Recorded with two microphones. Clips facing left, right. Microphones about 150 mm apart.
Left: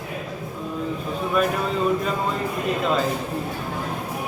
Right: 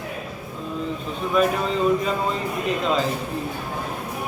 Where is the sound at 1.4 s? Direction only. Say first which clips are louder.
Right 2 dB; 5° left (ahead or behind).